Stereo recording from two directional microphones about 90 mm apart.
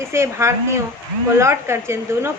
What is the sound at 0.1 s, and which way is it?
A woman's voice, 30° right (ahead or behind).